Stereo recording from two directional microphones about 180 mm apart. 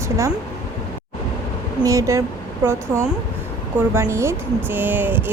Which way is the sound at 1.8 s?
15° right (ahead or behind).